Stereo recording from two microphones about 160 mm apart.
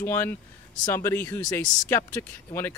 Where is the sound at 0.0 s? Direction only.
15° left (ahead or behind).